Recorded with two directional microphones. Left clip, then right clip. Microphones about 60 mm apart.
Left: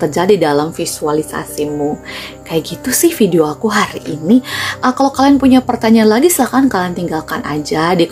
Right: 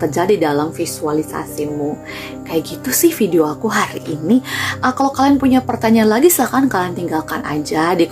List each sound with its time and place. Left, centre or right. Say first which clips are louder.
0.0 s speech: left 3 dB; left
2.5 s speech: left 2 dB; left
4.1 s speech: left 3 dB; centre
4.8 s a woman's voice: left 3 dB; left